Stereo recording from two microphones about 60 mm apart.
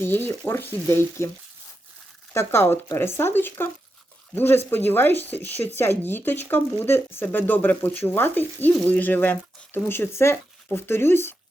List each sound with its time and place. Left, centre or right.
0.0 s speech: left
2.3 s speech: left